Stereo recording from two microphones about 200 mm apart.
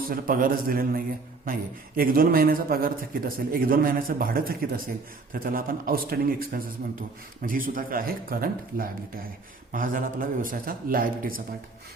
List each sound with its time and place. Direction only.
0.1 s a man's voice: 45° right (ahead or behind)